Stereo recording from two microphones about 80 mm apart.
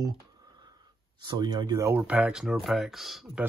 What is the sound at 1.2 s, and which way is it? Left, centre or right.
Speech, right.